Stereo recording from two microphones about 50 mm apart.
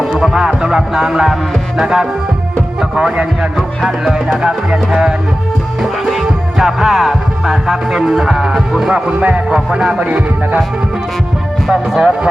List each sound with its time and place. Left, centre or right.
0.0 s music: centre
3.8 s music: centre
5.8 s music: centre
9.0 s speech: right
9.7 s music: centre
10.1 s speech: right
11.7 s music: centre